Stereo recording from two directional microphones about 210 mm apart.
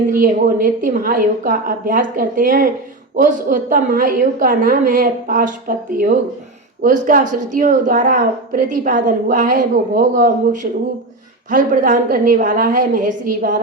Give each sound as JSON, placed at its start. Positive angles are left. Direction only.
{"t": 0.1, "sound": "a woman's voice", "side_deg": -40}